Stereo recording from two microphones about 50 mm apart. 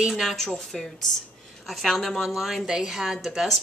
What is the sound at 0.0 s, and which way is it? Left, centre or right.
A woman's voice, centre.